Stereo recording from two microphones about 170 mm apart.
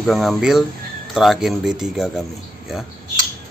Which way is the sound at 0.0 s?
Centre (ahead or behind).